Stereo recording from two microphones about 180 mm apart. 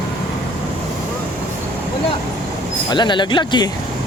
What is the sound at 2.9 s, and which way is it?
Speech, 25° left (ahead or behind).